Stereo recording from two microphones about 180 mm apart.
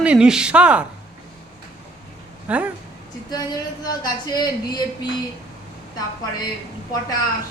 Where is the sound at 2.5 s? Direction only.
5° right (ahead or behind).